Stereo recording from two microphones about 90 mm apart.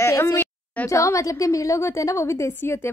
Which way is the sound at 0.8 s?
35° left (ahead or behind).